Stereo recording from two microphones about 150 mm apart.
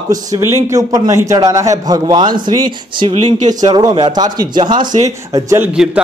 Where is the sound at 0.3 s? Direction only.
20° right (ahead or behind).